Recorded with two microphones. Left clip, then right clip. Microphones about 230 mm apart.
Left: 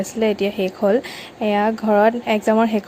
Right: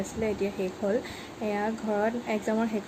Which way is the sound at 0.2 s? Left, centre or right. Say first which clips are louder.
Left 11 dB; left.